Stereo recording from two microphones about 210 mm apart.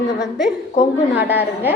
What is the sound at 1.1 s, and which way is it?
Speech, 10° right (ahead or behind).